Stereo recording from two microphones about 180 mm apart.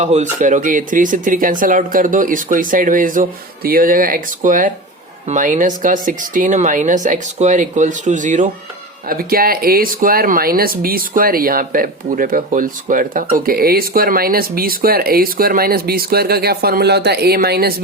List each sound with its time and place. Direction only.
0.0 s speech: 40° right (ahead or behind)
9.0 s speech: 55° right (ahead or behind)